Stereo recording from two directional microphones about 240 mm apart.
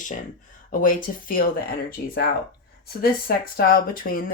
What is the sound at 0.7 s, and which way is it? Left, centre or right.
Speech, left.